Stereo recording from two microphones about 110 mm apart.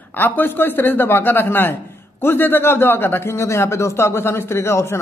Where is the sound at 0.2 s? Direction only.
20° left (ahead or behind).